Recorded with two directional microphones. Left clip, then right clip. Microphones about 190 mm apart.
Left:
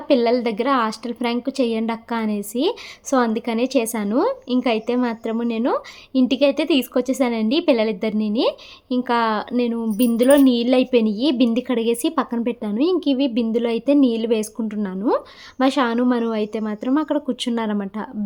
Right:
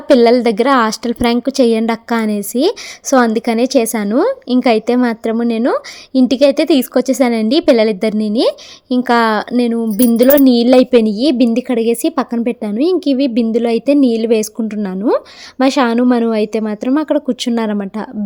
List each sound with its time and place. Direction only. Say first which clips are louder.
0.1 s a woman's voice: right 9 dB; 40° right (ahead or behind)